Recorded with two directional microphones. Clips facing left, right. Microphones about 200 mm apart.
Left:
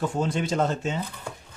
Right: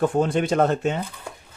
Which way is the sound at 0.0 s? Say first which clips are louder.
Right 6 dB; 55° right (ahead or behind).